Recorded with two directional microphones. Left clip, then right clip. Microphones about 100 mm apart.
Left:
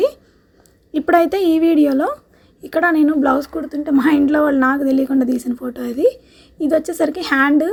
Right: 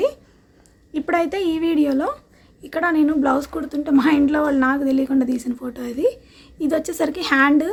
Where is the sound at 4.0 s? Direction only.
30° left (ahead or behind).